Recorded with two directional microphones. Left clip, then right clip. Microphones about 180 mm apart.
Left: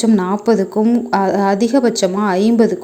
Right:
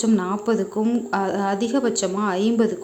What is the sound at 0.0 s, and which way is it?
Speech, 20° left (ahead or behind).